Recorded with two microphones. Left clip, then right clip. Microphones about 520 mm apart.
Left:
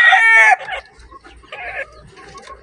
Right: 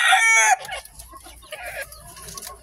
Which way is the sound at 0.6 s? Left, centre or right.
Right.